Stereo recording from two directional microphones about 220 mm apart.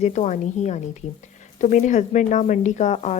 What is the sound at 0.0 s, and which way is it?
A woman's voice, 30° left (ahead or behind).